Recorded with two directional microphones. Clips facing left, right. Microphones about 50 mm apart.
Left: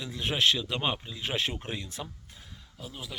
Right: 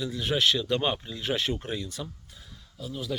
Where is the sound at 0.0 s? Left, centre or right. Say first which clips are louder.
Right 2 dB; left.